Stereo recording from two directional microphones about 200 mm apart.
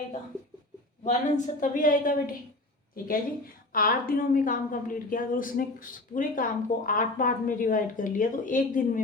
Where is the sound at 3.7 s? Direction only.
45° left (ahead or behind).